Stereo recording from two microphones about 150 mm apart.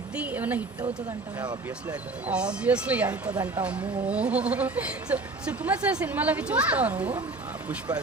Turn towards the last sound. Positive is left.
turn(degrees=-10)  # may be behind; listen again after turning